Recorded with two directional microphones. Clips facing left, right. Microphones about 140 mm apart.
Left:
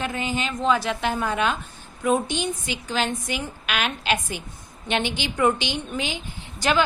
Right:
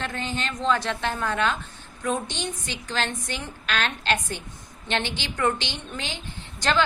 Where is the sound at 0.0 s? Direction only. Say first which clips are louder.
Left 3 dB; 10° left (ahead or behind).